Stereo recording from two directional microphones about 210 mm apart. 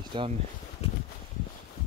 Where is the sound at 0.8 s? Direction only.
30° left (ahead or behind).